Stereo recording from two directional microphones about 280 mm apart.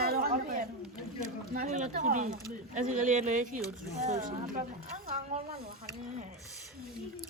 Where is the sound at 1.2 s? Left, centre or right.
Right.